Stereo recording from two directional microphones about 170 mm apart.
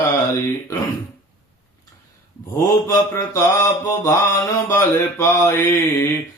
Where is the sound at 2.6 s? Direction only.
20° left (ahead or behind).